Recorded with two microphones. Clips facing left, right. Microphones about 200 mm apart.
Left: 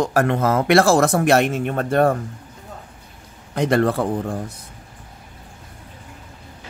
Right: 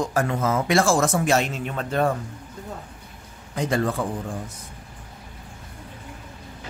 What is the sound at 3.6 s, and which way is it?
Speech, 65° left (ahead or behind).